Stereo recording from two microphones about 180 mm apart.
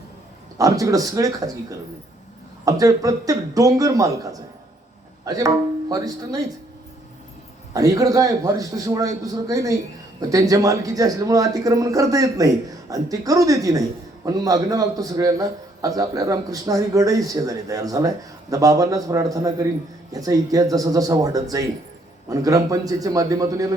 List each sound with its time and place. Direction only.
0.6 s a man's voice: 20° right (ahead or behind)
7.7 s a man's voice: 20° right (ahead or behind)